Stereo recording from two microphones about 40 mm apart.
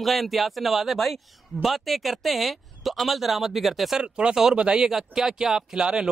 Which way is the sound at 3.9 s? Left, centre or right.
Right.